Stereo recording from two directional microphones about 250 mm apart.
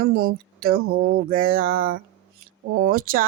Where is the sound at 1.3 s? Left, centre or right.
Right.